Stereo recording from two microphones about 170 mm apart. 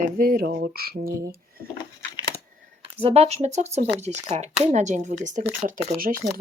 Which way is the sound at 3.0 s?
35° right (ahead or behind).